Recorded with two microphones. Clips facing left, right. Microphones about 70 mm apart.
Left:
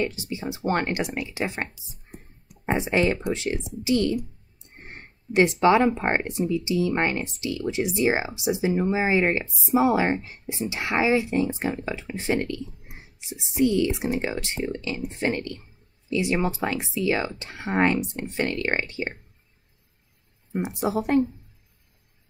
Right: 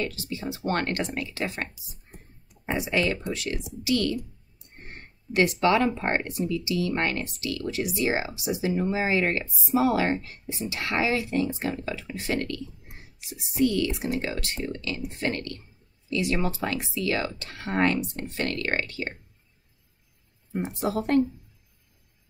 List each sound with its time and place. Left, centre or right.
0.0 s speech: left
3.8 s a sound: left
5.6 s speech: left
10.4 s speech: left
10.7 s speech: left
20.8 s speech: centre